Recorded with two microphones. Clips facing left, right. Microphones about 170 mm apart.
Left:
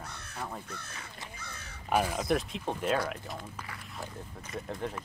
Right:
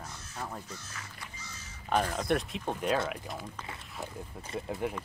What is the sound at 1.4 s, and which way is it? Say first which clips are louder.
Crow: left 3 dB; 60° left (ahead or behind).